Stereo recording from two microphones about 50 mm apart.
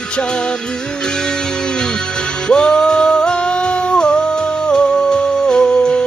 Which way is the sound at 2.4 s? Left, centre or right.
Centre.